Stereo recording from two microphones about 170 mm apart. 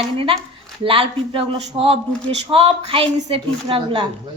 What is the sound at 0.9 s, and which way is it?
A woman's voice, 35° right (ahead or behind).